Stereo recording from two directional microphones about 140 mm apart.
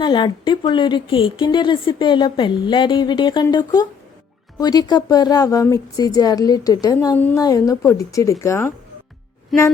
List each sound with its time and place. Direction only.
0.0 s speech: 35° left (ahead or behind); by 8.7 s 20° left (ahead or behind)